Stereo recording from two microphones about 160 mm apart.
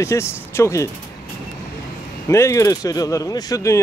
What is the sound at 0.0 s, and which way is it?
Speech, 15° left (ahead or behind).